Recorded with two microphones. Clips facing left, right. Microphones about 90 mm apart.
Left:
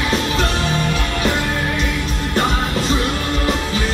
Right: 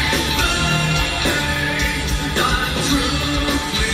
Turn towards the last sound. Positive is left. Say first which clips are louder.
# left 1 dB
turn(degrees=40)  # may be behind; listen again after turning